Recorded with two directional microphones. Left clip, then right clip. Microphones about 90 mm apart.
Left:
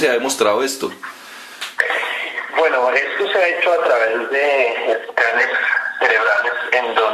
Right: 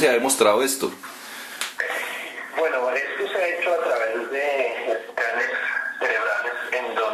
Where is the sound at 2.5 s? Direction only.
20° left (ahead or behind).